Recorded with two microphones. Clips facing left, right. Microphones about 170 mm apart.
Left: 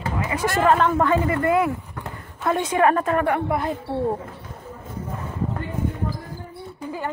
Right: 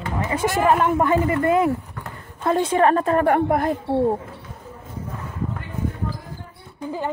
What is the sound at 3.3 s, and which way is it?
Speech, 50° right (ahead or behind).